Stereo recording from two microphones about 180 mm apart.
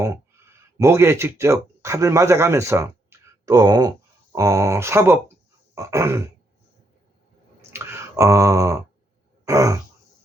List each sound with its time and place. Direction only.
0.0 s speech: 15° right (ahead or behind)
5.7 s throat clearing: 15° right (ahead or behind)
7.7 s a sound: 15° right (ahead or behind)
9.5 s throat clearing: 15° right (ahead or behind)